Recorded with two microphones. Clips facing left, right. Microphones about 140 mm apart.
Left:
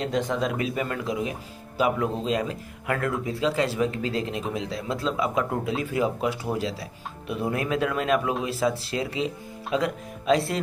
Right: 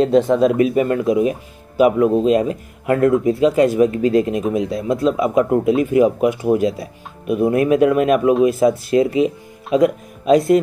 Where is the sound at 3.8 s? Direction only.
25° left (ahead or behind).